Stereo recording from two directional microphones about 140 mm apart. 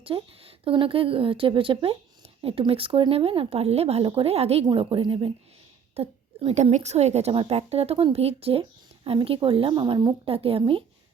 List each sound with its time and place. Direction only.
0.0 s a woman's voice: 40° right (ahead or behind)
4.6 s a woman's voice: 35° right (ahead or behind)
6.0 s a woman's voice: 50° right (ahead or behind); by 10.2 s 30° right (ahead or behind)
10.2 s a woman's voice: 45° right (ahead or behind)